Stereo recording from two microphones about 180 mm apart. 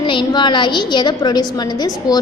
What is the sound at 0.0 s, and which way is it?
A woman's voice, 25° left (ahead or behind).